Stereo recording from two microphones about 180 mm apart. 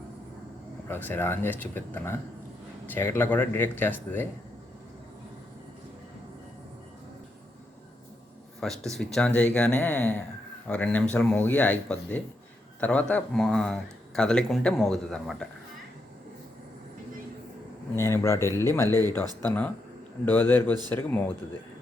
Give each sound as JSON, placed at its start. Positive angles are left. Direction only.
{"t": 0.9, "sound": "speech", "side_deg": 10}
{"t": 8.6, "sound": "speech", "side_deg": 0}
{"t": 17.9, "sound": "speech", "side_deg": 15}